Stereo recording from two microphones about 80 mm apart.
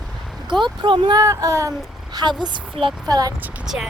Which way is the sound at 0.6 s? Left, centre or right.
Right.